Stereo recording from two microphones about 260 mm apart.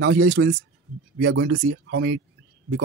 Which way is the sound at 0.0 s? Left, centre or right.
Right.